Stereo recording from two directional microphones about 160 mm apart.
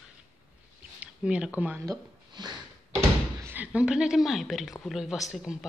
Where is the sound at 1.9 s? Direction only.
25° right (ahead or behind).